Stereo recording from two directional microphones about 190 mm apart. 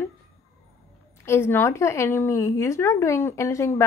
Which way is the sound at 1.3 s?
10° left (ahead or behind).